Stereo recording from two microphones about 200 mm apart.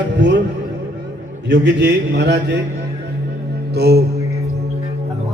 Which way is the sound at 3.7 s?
55° right (ahead or behind).